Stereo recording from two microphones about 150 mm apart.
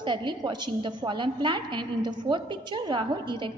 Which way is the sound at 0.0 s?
30° right (ahead or behind).